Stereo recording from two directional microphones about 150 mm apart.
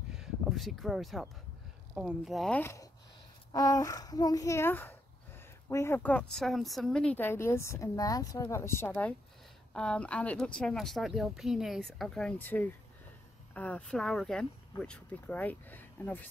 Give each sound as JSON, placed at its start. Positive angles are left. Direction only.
{"t": 0.1, "sound": "a sound", "side_deg": 0}
{"t": 2.0, "sound": "speech", "side_deg": -5}
{"t": 2.6, "sound": "a child's voice", "side_deg": 20}